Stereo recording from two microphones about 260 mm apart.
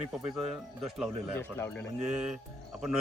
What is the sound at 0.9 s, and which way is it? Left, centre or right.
Speech, centre.